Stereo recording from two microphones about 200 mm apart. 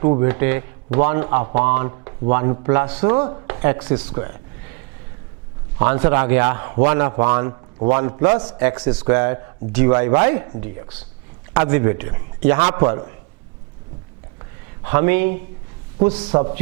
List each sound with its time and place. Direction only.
0.0 s speech: 20° right (ahead or behind)
1.9 s a sound: 25° right (ahead or behind)
2.3 s speech: 20° right (ahead or behind)
3.4 s a sound: 15° right (ahead or behind)
3.8 s speech: 10° right (ahead or behind)
4.1 s a man's voice: 20° right (ahead or behind)
5.8 s a man's voice: 15° right (ahead or behind)
8.8 s a man's voice: 10° right (ahead or behind)
12.5 s a man's voice: 25° right (ahead or behind)
14.8 s speech: 15° right (ahead or behind)
16.3 s a man's voice: 30° right (ahead or behind)